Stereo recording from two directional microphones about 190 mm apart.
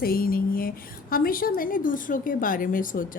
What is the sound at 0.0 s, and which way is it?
A woman's voice, 50° left (ahead or behind).